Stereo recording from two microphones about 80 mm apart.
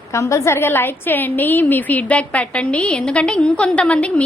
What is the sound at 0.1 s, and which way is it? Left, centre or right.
A woman's voice, left.